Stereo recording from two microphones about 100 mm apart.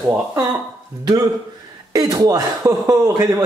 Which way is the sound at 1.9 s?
40° right (ahead or behind).